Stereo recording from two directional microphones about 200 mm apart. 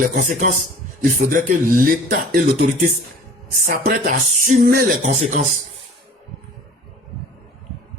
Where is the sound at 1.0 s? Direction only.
45° right (ahead or behind).